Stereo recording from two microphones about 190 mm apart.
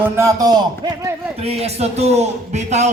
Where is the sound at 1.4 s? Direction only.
30° right (ahead or behind).